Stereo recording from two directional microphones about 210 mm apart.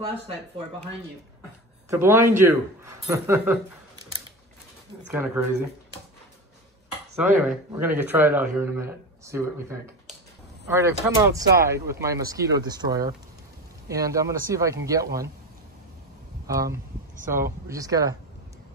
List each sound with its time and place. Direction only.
1.9 s speech: 10° right (ahead or behind)
5.1 s speech: 10° right (ahead or behind)
7.2 s speech: 5° right (ahead or behind)
16.4 s speech: 15° right (ahead or behind)